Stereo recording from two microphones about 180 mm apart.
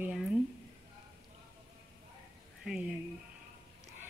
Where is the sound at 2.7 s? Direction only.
5° right (ahead or behind).